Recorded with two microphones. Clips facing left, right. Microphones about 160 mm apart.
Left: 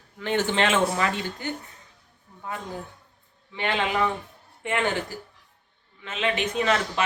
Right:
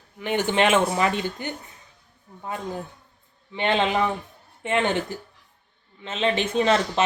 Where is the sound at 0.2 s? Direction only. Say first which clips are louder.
Right 2 dB; 15° right (ahead or behind).